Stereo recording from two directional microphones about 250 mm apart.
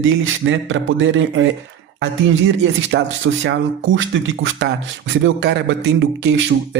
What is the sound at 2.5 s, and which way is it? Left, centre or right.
Speech, right.